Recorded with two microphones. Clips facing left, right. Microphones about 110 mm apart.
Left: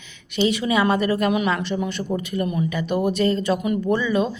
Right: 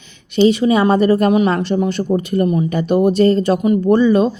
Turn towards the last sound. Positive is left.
turn(degrees=-35)  # may be behind; listen again after turning